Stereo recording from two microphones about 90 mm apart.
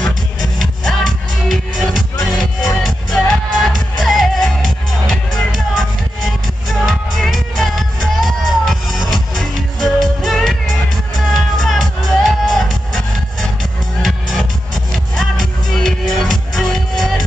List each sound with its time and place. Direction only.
0.0 s music: centre (ahead or behind)
6.9 s music: centre (ahead or behind)
15.7 s music: centre (ahead or behind)